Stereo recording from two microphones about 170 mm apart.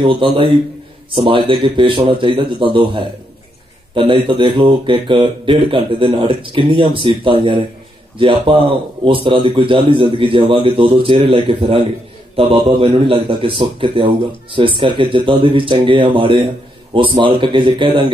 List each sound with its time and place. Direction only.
0.0 s a man's voice: 30° right (ahead or behind)